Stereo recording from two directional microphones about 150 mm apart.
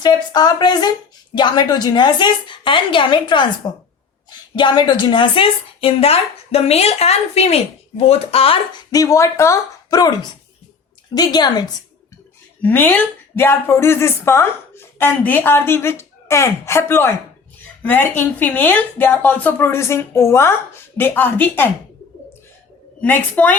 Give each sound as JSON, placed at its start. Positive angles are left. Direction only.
{"t": 0.0, "sound": "a woman's voice", "side_deg": 30}
{"t": 8.9, "sound": "speech", "side_deg": 20}
{"t": 12.6, "sound": "a woman's voice", "side_deg": 10}
{"t": 23.0, "sound": "a woman's voice", "side_deg": 10}